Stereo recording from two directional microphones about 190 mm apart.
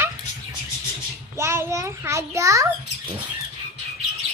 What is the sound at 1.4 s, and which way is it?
A child's voice, 15° right (ahead or behind).